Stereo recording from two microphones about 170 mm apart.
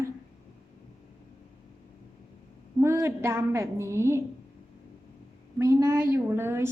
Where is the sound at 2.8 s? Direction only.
15° right (ahead or behind).